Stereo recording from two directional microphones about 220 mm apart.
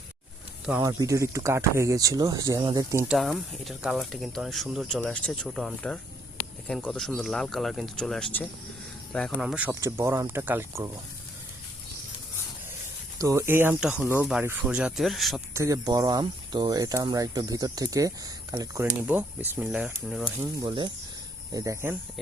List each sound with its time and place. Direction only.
0.6 s speech: 5° right (ahead or behind)
0.9 s speech: 15° right (ahead or behind)
3.2 s speech: centre (ahead or behind)
13.1 s speech: 15° right (ahead or behind)
15.5 s speech: 15° right (ahead or behind)
20.4 s speech: 20° right (ahead or behind)